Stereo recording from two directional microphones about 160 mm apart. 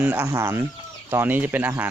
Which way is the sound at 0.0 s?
10° right (ahead or behind).